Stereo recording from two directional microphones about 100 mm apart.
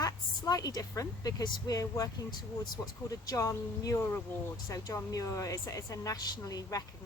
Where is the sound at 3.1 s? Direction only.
35° left (ahead or behind).